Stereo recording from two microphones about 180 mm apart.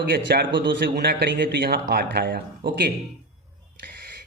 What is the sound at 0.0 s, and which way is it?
A man's voice, 65° right (ahead or behind).